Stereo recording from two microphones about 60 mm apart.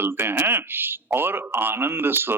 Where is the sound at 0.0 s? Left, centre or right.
Right.